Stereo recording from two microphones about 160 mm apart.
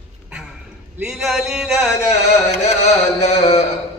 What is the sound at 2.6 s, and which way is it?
Carnatic music, 45° left (ahead or behind).